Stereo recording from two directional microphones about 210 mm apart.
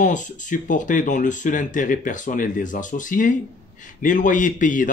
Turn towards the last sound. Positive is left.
turn(degrees=40)  # may be behind; listen again after turning